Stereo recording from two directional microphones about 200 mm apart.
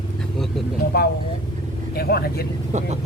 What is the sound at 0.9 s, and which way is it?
Speech, 50° left (ahead or behind).